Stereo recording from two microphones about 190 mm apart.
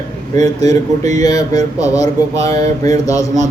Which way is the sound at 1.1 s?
20° left (ahead or behind).